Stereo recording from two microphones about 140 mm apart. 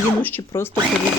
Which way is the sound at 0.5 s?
20° left (ahead or behind).